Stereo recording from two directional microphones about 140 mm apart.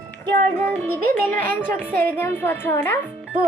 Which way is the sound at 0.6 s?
15° left (ahead or behind).